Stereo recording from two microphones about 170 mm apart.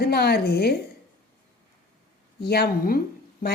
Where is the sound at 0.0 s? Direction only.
70° left (ahead or behind).